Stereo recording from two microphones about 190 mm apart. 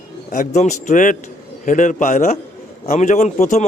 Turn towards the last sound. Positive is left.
turn(degrees=40)  # may be behind; listen again after turning